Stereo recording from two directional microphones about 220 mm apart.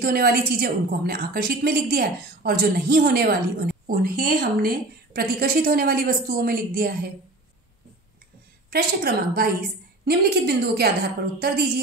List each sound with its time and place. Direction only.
0.0 s a woman's voice: 45° right (ahead or behind)
8.6 s a woman's voice: 45° right (ahead or behind)